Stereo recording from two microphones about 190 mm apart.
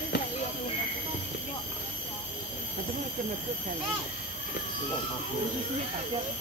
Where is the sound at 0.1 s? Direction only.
60° left (ahead or behind).